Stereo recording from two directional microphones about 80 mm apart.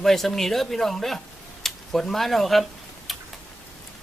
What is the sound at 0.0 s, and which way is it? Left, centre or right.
Speech, centre.